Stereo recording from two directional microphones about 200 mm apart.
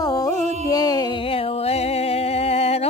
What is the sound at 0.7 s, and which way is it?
Music, 20° left (ahead or behind).